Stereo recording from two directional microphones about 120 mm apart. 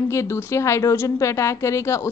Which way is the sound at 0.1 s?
25° left (ahead or behind).